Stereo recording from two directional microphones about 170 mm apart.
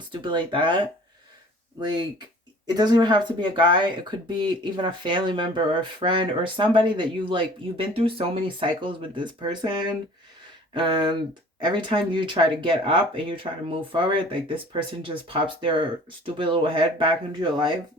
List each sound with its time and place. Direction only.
0.1 s speech: 30° right (ahead or behind)
2.6 s speech: 25° right (ahead or behind)